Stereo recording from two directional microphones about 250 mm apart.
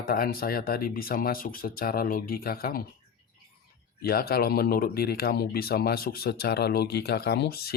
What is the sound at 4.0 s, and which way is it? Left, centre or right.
Speech, left.